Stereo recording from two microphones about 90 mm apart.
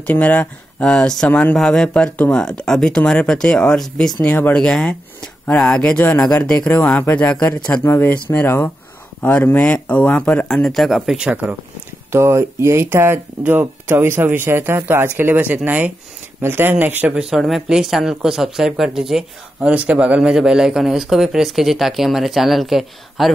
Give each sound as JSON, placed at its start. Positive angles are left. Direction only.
{"t": 0.0, "sound": "speech", "side_deg": 20}
{"t": 0.8, "sound": "speech", "side_deg": 10}
{"t": 11.2, "sound": "speech", "side_deg": -15}
{"t": 12.1, "sound": "speech", "side_deg": -30}
{"t": 17.1, "sound": "speech", "side_deg": -5}
{"t": 19.7, "sound": "speech", "side_deg": -15}